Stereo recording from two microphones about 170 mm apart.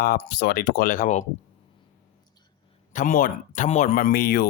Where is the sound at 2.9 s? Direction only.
50° left (ahead or behind).